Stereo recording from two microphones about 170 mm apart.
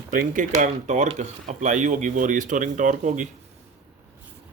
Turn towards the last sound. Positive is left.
turn(degrees=-45)  # may be behind; listen again after turning